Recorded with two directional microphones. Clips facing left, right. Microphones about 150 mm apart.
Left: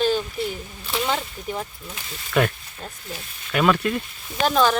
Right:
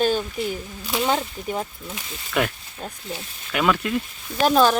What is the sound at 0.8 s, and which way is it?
Speech, 10° right (ahead or behind).